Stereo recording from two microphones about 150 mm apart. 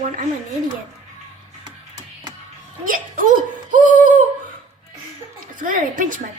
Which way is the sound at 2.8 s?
60° right (ahead or behind).